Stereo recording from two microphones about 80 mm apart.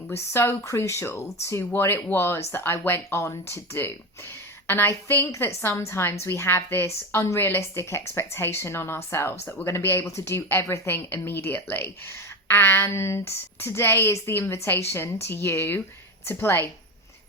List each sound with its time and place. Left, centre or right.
0.1 s a woman's voice: left